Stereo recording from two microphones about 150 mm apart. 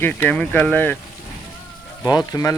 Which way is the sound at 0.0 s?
10° left (ahead or behind).